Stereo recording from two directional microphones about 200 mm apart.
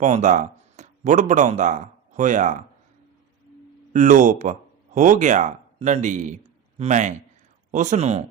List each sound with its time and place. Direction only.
0.0 s speech: 40° right (ahead or behind)
3.9 s speech: 40° right (ahead or behind)